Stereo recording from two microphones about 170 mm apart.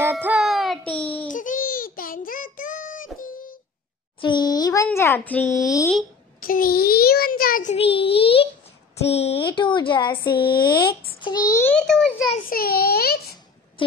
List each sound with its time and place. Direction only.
0.1 s music: 5° right (ahead or behind)
1.3 s child singing: 50° left (ahead or behind)
3.2 s wail: 55° left (ahead or behind)
4.2 s a sound: 25° left (ahead or behind)
4.8 s a child's voice: 15° left (ahead or behind)
6.4 s a child's voice: 60° left (ahead or behind)
7.7 s a child's voice: 35° left (ahead or behind)
10.3 s a child's voice: 65° left (ahead or behind)
10.6 s a child's voice: 25° left (ahead or behind)
11.6 s a child's voice: 5° left (ahead or behind)
12.4 s a child's voice: 65° left (ahead or behind)
13.8 s a sound: 30° left (ahead or behind)